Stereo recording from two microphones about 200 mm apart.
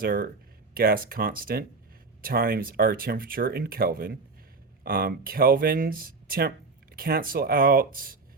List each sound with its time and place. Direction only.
0.0 s speech: 45° right (ahead or behind)